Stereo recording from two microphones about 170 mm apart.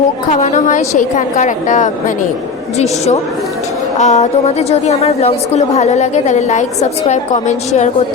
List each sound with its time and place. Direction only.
0.3 s a woman's voice: 45° left (ahead or behind)